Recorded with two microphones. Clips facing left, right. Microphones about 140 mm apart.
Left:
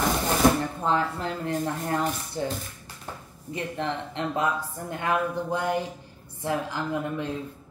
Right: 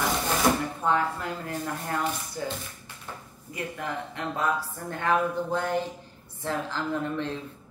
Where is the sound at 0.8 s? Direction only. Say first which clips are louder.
Right 1 dB; 30° left (ahead or behind).